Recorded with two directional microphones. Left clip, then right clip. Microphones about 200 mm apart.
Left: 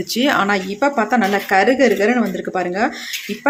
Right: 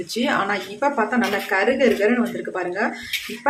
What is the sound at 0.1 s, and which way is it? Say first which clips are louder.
Speech: left 5 dB; 45° left (ahead or behind).